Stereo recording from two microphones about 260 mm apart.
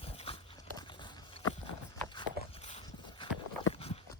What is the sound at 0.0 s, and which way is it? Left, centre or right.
Dog, left.